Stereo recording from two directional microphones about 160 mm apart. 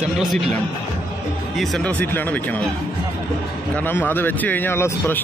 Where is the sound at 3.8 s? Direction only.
10° left (ahead or behind).